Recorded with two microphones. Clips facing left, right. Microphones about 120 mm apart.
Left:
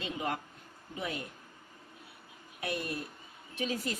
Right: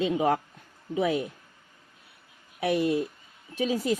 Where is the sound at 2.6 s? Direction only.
90° right.